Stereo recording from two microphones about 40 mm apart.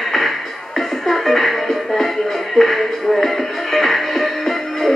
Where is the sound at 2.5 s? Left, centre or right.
Centre.